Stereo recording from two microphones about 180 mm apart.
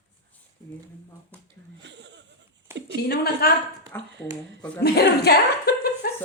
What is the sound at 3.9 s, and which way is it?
Speech, 10° left (ahead or behind).